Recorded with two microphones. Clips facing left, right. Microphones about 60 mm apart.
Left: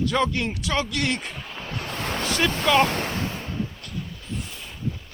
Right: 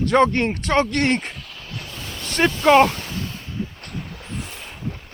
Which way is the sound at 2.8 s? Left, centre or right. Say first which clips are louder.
Even; left.